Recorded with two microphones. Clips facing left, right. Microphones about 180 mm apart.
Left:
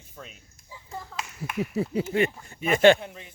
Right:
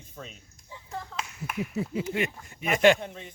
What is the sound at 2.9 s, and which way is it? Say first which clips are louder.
Speech: right 1 dB; 5° left (ahead or behind).